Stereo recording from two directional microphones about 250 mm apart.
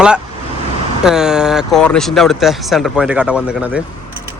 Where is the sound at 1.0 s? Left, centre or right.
Centre.